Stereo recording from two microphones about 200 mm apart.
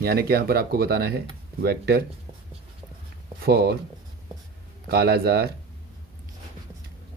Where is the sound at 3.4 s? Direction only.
50° right (ahead or behind).